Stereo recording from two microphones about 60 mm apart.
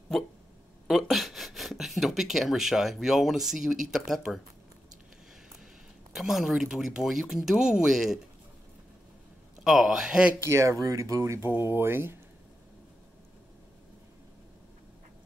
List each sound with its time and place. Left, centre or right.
0.8 s speech: centre
6.1 s speech: centre
9.6 s speech: centre
10.4 s speech: right